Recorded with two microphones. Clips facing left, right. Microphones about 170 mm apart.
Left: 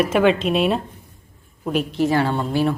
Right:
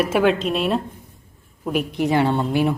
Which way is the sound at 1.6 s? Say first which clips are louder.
Left 1 dB; 10° right (ahead or behind).